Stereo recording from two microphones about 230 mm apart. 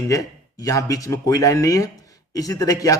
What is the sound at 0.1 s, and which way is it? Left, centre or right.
Speech, centre.